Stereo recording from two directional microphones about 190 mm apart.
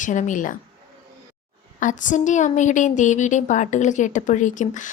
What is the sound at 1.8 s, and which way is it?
A woman's voice, 40° left (ahead or behind).